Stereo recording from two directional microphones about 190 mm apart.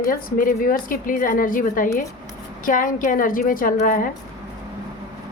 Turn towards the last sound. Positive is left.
turn(degrees=45)  # may be behind; listen again after turning